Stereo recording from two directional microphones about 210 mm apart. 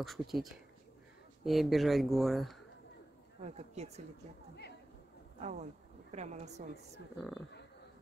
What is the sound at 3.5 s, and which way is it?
Speech, 30° right (ahead or behind).